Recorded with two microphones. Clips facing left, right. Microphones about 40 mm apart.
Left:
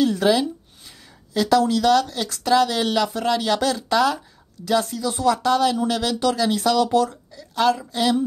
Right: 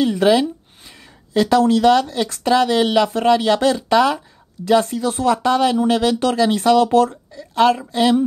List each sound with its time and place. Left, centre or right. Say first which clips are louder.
0.0 s a woman's voice: right 3 dB; right